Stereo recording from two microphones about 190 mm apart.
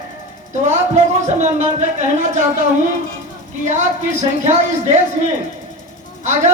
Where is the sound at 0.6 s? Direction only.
40° right (ahead or behind).